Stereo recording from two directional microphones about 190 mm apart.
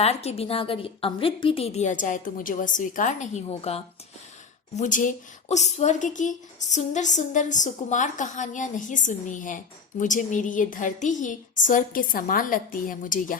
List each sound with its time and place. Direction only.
0.0 s a woman's voice: 35° left (ahead or behind)